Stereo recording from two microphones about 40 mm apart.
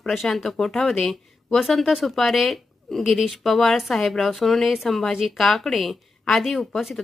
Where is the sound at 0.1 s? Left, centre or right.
Centre.